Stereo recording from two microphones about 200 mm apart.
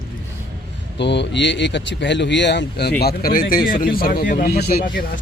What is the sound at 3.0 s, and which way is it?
A man's voice, 50° left (ahead or behind).